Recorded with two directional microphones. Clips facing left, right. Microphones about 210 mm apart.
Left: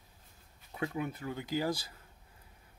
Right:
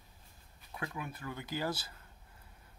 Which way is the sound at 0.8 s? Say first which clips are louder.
Left 6 dB; 25° left (ahead or behind).